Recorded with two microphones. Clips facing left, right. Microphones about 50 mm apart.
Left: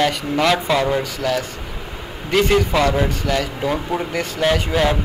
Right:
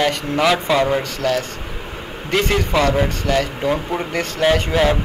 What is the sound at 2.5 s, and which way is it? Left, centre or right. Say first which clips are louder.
Speech: right 1 dB; centre.